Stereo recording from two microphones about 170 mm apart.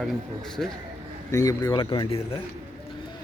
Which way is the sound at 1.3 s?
20° left (ahead or behind).